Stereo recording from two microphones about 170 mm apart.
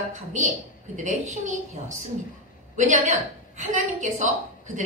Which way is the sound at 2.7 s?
45° right (ahead or behind).